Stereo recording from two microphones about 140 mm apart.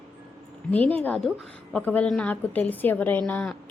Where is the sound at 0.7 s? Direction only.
10° left (ahead or behind).